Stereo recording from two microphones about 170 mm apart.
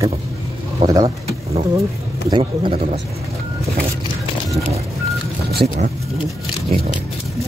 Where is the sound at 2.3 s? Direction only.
30° right (ahead or behind).